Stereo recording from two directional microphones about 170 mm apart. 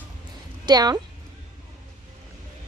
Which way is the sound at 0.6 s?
25° right (ahead or behind).